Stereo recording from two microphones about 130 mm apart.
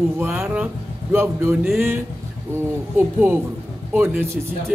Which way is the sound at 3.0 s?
15° right (ahead or behind).